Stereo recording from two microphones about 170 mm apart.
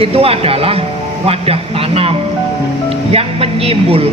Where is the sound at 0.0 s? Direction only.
35° right (ahead or behind).